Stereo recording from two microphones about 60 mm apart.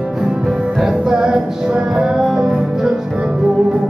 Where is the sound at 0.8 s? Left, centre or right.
Centre.